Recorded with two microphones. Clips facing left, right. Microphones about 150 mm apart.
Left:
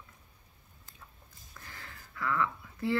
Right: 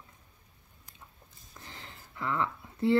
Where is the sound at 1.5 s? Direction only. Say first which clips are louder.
Right 1 dB; 20° right (ahead or behind).